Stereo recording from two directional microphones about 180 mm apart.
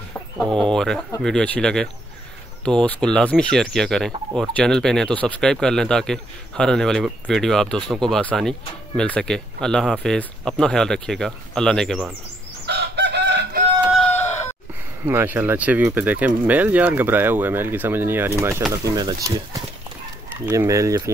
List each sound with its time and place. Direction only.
0.6 s speech: 5° left (ahead or behind)
12.6 s chicken: 70° right (ahead or behind)
13.9 s chicken: 10° left (ahead or behind)
15.0 s speech: 10° right (ahead or behind)
20.4 s speech: 15° right (ahead or behind)